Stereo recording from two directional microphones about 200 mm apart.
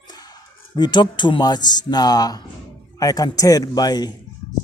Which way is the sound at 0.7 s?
20° left (ahead or behind).